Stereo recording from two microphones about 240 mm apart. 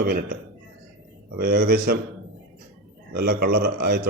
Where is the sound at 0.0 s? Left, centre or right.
Right.